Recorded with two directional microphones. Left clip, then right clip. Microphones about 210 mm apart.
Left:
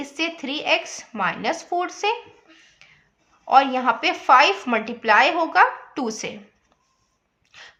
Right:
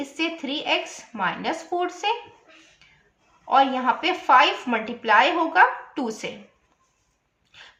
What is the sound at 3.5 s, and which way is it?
A woman's voice, 40° left (ahead or behind).